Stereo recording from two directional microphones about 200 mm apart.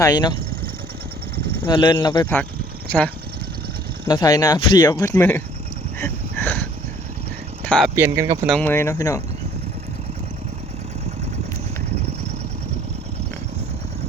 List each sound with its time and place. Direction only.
0.0 s speech: 20° left (ahead or behind)
1.6 s speech: 20° left (ahead or behind)
2.4 s vehicle: 5° left (ahead or behind)
4.1 s speech: 20° left (ahead or behind)
6.0 s a sound: 10° left (ahead or behind)
7.9 s speech: 15° right (ahead or behind)
8.4 s speech: 5° left (ahead or behind)